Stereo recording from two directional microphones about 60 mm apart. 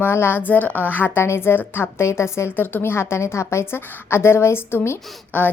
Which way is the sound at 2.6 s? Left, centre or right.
Left.